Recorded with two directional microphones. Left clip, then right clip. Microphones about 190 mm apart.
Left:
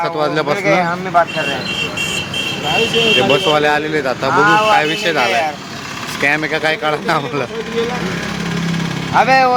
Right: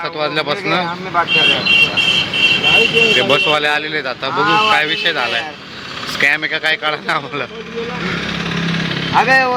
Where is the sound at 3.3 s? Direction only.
5° left (ahead or behind).